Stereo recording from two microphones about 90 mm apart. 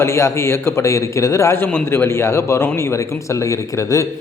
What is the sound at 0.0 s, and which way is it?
A man's voice, 30° left (ahead or behind).